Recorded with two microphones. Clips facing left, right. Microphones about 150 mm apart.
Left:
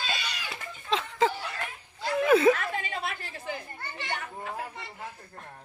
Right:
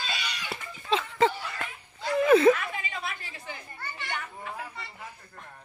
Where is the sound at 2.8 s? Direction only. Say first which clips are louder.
Left 2 dB; 50° left (ahead or behind).